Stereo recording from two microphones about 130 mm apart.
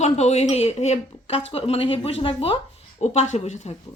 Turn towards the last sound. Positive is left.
turn(degrees=60)  # may be behind; listen again after turning